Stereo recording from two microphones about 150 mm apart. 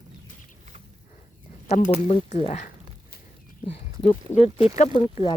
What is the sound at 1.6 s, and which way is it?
Speech, 50° left (ahead or behind).